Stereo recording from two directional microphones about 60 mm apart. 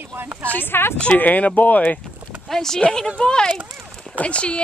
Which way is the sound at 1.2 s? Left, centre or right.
Left.